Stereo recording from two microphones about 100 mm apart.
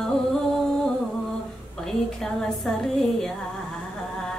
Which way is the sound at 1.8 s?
5° left (ahead or behind).